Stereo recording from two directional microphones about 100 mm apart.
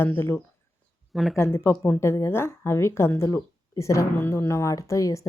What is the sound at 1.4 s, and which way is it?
A woman's voice, 25° left (ahead or behind).